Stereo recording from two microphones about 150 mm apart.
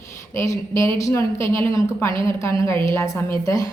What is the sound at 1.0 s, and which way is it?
A woman's voice, 20° left (ahead or behind).